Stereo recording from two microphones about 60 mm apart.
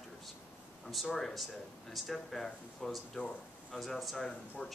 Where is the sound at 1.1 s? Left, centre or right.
Centre.